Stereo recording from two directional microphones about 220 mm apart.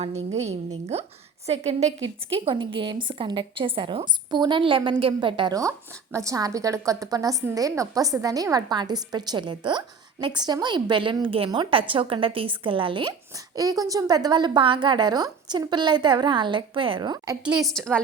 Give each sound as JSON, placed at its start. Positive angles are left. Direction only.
{"t": 0.0, "sound": "a woman's voice", "side_deg": -30}
{"t": 17.4, "sound": "a woman's voice", "side_deg": 0}